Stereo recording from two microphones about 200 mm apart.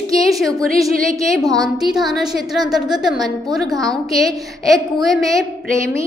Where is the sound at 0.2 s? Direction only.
Centre (ahead or behind).